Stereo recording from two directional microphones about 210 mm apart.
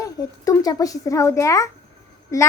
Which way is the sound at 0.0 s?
15° left (ahead or behind).